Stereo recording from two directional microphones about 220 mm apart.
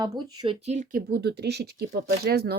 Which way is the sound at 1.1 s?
50° right (ahead or behind).